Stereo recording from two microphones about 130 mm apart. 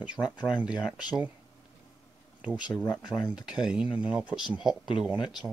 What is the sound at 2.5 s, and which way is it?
Speech, 35° left (ahead or behind).